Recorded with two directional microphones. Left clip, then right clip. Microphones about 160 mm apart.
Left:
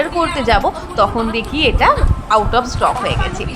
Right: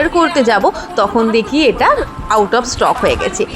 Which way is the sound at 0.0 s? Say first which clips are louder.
Right 5 dB; 25° right (ahead or behind).